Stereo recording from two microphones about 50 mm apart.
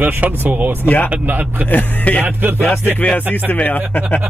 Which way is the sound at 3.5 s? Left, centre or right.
Left.